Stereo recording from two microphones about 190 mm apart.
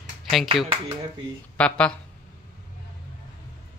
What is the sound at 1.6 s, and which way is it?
Speech, 5° left (ahead or behind).